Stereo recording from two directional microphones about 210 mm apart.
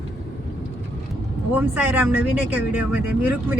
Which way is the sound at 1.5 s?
10° right (ahead or behind).